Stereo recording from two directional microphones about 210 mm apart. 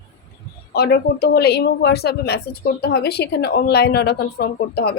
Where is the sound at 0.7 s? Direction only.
50° left (ahead or behind).